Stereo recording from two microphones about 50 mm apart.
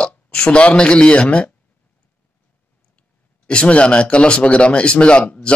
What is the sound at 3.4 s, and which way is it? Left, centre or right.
Speech, centre.